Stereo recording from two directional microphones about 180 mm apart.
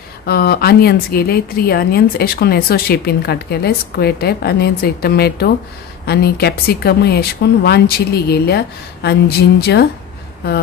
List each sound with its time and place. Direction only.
0.3 s speech: 60° left (ahead or behind)